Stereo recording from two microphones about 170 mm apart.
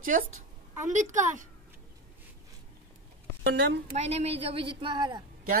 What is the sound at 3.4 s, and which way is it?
Speech, 90° right.